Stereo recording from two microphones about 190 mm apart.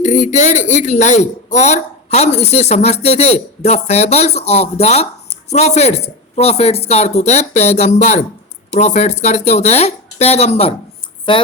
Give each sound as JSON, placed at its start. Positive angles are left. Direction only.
{"t": 0.0, "sound": "a woman's voice", "side_deg": 40}